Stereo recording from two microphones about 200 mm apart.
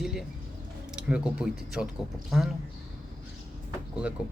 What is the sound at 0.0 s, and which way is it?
Bird, centre (ahead or behind).